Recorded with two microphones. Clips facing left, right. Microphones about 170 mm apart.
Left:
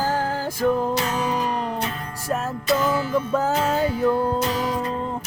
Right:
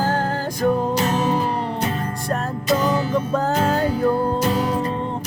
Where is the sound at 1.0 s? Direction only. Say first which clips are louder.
Right 4 dB; 45° right (ahead or behind).